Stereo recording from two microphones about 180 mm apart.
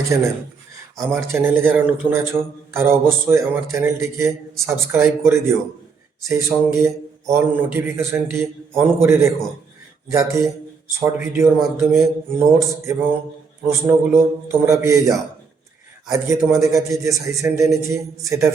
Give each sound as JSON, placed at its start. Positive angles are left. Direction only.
{"t": 0.1, "sound": "a man's voice", "side_deg": -15}
{"t": 13.7, "sound": "a man's voice", "side_deg": -15}